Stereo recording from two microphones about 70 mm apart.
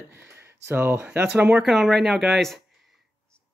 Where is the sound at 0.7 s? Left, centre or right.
Right.